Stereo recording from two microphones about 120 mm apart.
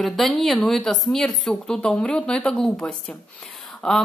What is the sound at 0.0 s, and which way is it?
Speech, centre (ahead or behind).